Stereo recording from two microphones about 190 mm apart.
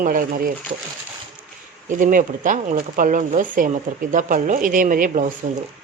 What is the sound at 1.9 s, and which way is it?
Speech, 45° right (ahead or behind).